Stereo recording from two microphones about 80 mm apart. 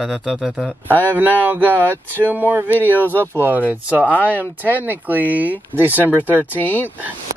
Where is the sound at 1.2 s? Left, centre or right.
Right.